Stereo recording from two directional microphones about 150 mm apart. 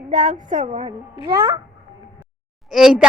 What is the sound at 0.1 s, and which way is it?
Speech, 60° right (ahead or behind).